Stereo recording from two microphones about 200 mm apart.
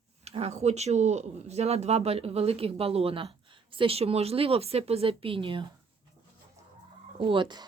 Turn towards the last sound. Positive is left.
turn(degrees=-25)  # may be behind; listen again after turning